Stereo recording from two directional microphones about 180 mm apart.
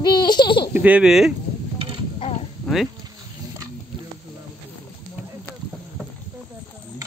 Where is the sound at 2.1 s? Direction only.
35° left (ahead or behind).